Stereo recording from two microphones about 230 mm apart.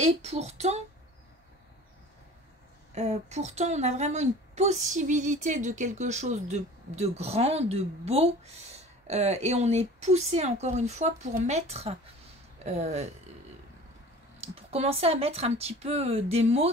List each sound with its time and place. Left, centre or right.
0.0 s a woman's voice: right
2.9 s a woman's voice: right
14.4 s a woman's voice: right